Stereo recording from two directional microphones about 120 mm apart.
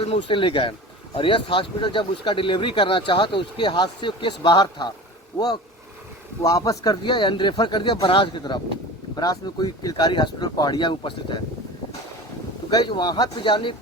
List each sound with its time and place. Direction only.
0.0 s speech: 50° left (ahead or behind)
6.4 s speech: 30° left (ahead or behind)
7.0 s speech: 40° left (ahead or behind)
12.7 s speech: 40° left (ahead or behind)